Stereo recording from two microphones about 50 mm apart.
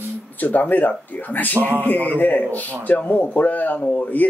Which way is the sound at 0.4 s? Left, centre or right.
Left.